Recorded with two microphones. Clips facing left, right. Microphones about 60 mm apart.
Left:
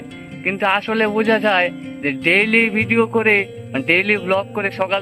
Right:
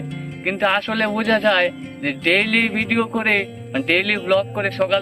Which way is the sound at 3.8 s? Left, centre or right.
Left.